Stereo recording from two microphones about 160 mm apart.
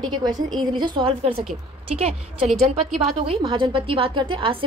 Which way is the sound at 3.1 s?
35° right (ahead or behind).